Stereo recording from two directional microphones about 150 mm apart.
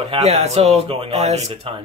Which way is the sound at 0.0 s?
45° right (ahead or behind).